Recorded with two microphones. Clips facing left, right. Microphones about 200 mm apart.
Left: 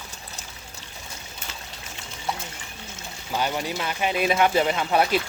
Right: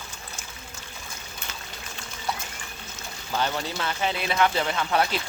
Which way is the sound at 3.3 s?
15° left (ahead or behind).